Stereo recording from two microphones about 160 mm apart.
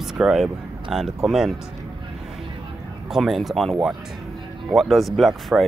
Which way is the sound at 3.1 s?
Centre (ahead or behind).